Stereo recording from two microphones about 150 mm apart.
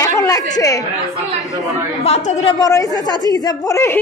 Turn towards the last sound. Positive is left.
turn(degrees=20)  # may be behind; listen again after turning